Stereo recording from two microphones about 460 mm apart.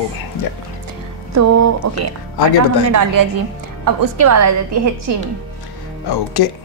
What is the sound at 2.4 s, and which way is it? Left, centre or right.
Speech, left.